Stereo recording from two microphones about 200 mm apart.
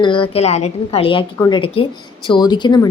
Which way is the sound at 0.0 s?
25° left (ahead or behind).